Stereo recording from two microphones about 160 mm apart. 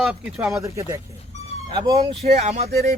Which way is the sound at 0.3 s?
20° right (ahead or behind).